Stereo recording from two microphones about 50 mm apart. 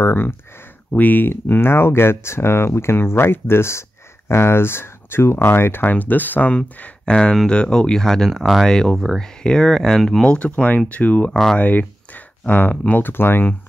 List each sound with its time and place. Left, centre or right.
0.0 s speech: left
0.9 s speech: left
5.9 s speech: left
6.5 s speech: left
8.3 s speech: centre
8.6 s speech: centre
8.9 s speech: centre
9.2 s speech: centre
10.2 s speech: left
13.1 s speech: left